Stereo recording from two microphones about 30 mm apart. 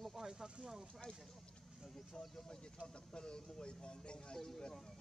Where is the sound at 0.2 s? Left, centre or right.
Centre.